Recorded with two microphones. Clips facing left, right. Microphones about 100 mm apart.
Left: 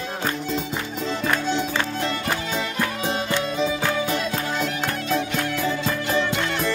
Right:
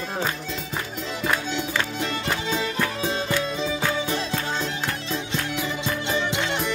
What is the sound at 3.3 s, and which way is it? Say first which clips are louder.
Music: left 2 dB; 20° left (ahead or behind).